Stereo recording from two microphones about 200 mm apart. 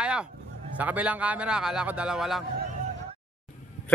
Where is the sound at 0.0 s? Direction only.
5° right (ahead or behind).